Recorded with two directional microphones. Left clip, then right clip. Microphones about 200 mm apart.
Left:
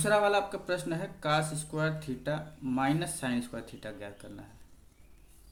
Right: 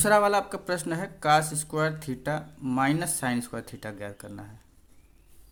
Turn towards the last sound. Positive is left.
turn(degrees=-50)  # may be behind; listen again after turning